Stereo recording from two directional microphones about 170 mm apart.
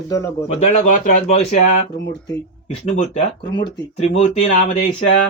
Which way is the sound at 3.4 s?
30° left (ahead or behind).